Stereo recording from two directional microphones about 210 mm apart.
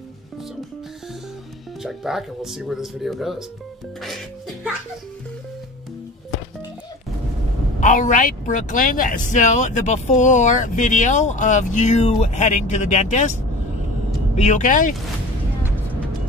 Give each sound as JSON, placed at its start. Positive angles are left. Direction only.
{"t": 1.8, "sound": "speech", "side_deg": 0}
{"t": 7.8, "sound": "speech", "side_deg": 35}
{"t": 14.3, "sound": "speech", "side_deg": 35}